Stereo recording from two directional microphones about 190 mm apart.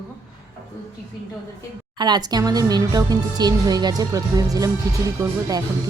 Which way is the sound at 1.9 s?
20° right (ahead or behind).